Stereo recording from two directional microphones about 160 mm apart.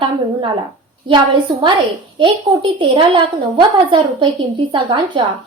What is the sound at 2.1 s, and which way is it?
A woman's voice, 30° right (ahead or behind).